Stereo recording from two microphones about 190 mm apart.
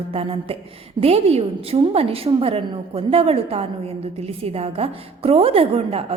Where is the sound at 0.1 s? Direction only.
30° right (ahead or behind).